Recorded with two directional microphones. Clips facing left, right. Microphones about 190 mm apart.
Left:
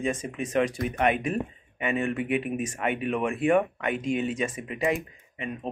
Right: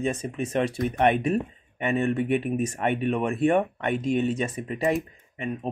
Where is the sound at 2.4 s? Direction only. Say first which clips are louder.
Right 3 dB; 35° right (ahead or behind).